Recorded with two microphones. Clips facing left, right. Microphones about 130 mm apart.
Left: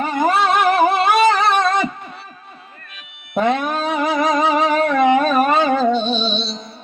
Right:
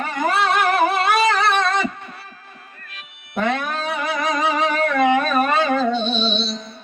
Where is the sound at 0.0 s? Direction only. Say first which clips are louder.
Left 4 dB; 25° left (ahead or behind).